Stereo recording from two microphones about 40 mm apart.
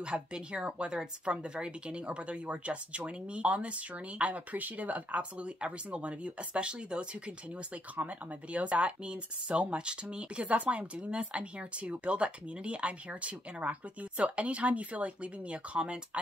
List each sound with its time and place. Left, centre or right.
0.0 s a woman's voice: right
7.9 s speech: right